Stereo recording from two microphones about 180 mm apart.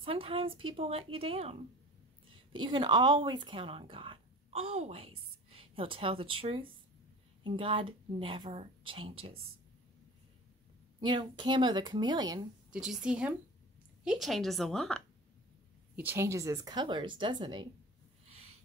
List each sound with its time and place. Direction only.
0.0 s speech: 30° right (ahead or behind)
11.0 s speech: 25° right (ahead or behind)
12.7 s a woman's voice: 5° right (ahead or behind)
16.0 s speech: 10° right (ahead or behind)